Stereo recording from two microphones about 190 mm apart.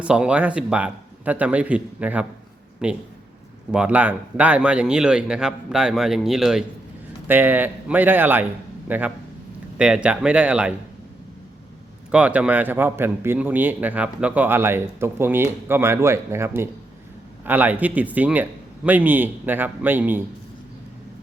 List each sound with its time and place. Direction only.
0.0 s a man's voice: 5° right (ahead or behind)
12.1 s a man's voice: 5° right (ahead or behind)